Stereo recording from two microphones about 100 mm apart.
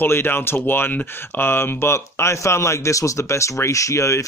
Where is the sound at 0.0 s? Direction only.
20° left (ahead or behind).